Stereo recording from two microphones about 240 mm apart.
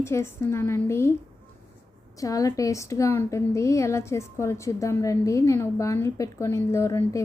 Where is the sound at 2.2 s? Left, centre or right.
Centre.